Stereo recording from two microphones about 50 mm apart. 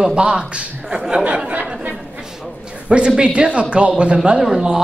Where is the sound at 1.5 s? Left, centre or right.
Right.